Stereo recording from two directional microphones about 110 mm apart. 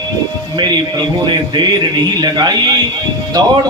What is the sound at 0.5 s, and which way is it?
A man's voice, 40° right (ahead or behind).